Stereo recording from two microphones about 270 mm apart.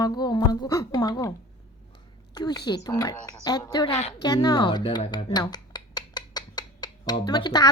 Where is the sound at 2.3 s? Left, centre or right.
Centre.